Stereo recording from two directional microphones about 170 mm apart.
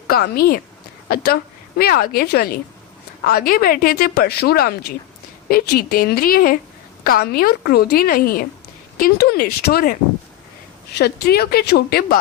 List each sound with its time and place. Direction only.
0.1 s a woman's voice: 65° left (ahead or behind)